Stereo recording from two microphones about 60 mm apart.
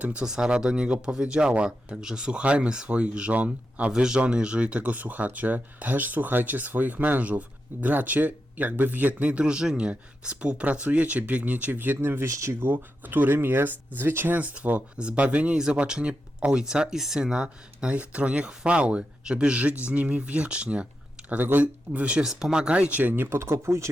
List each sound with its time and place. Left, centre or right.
0.0 s speech: right
12.3 s speech: right
12.6 s speech: right
14.3 s speech: right
21.2 s speech: right